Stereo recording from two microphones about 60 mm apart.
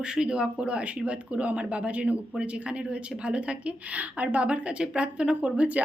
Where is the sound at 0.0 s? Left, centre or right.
Centre.